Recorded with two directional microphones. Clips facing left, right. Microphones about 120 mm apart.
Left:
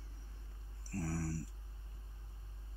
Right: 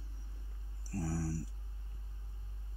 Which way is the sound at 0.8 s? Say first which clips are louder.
Right 2 dB; 10° right (ahead or behind).